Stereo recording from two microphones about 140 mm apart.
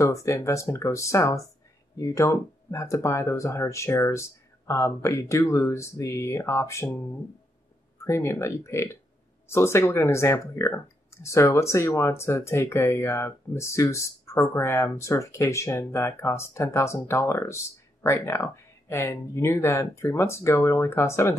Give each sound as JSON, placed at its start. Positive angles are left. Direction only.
{"t": 0.0, "sound": "speech", "side_deg": 20}
{"t": 8.0, "sound": "speech", "side_deg": 20}